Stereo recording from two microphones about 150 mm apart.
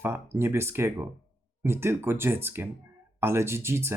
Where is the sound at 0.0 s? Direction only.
15° right (ahead or behind).